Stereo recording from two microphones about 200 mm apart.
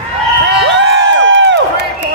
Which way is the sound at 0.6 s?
65° right (ahead or behind).